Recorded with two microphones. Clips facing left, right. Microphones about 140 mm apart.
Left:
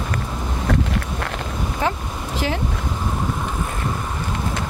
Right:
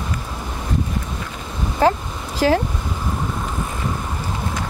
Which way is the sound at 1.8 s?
35° right (ahead or behind).